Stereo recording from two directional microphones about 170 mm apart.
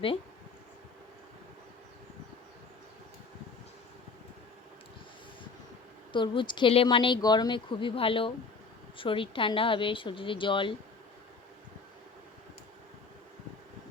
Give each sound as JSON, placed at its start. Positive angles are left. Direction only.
{"t": 6.1, "sound": "a woman's voice", "side_deg": 30}